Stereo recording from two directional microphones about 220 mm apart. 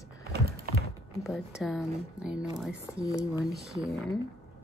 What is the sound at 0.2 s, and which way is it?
Typing, 45° right (ahead or behind).